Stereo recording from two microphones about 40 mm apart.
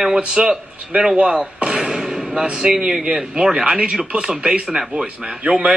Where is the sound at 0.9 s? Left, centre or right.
Right.